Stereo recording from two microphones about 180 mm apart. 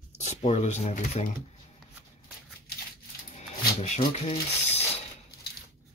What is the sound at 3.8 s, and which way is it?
Speech, 35° left (ahead or behind).